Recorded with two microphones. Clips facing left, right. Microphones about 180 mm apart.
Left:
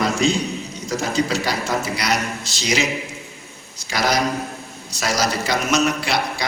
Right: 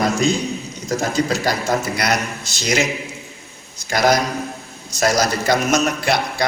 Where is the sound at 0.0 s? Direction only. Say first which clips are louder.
Right 1 dB; 45° right (ahead or behind).